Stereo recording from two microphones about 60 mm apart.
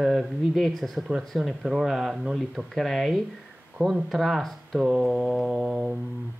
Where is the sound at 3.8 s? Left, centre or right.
Right.